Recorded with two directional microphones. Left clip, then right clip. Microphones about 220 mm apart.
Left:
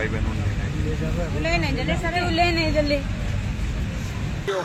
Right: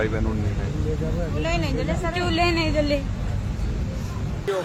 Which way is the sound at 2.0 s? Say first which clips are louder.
Left 2 dB; 15° right (ahead or behind).